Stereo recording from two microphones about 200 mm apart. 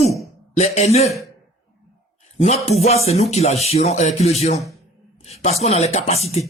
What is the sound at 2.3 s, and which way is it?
A woman's voice, 30° left (ahead or behind).